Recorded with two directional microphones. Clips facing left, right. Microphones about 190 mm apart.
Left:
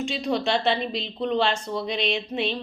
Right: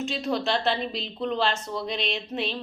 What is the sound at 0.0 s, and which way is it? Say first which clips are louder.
A woman's voice: left 2 dB; centre (ahead or behind).